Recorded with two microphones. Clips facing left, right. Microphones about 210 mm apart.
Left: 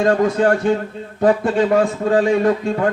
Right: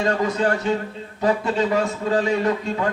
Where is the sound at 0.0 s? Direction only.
50° left (ahead or behind).